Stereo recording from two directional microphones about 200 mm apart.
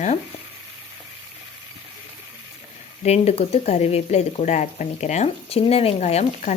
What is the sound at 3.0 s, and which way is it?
A woman's voice, 30° left (ahead or behind).